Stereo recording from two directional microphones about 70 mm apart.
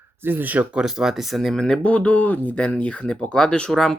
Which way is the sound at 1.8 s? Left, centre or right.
Centre.